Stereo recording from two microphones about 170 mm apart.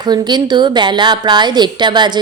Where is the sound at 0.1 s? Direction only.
25° right (ahead or behind).